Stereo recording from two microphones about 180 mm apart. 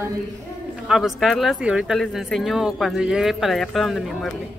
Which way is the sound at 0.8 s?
Centre (ahead or behind).